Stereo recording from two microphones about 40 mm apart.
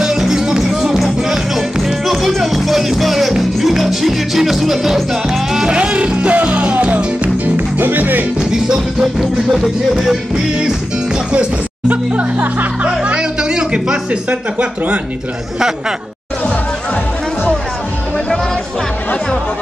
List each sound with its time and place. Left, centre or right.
0.0 s music: centre
5.7 s music: right
7.4 s music: right
8.4 s music: centre
9.0 s music: centre
11.9 s music: right